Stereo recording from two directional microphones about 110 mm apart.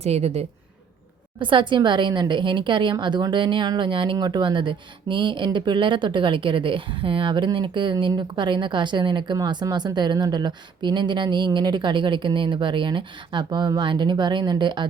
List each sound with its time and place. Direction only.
0.0 s a woman's voice: 70° right (ahead or behind)
1.4 s speech: 50° right (ahead or behind)